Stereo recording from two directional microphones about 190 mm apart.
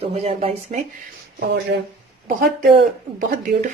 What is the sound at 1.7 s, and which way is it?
Speech, 60° right (ahead or behind).